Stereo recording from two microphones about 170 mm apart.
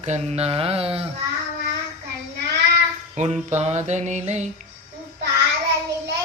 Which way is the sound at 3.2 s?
45° right (ahead or behind).